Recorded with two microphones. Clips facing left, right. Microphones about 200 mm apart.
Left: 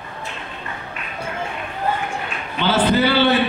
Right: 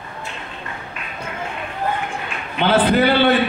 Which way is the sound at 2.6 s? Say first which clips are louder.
Right 2 dB; 60° right (ahead or behind).